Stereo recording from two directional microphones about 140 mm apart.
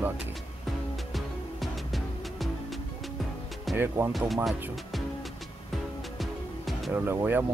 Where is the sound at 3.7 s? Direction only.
15° right (ahead or behind).